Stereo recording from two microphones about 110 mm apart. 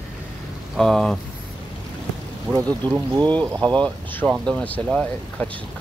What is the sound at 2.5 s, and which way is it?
Speech, 20° right (ahead or behind).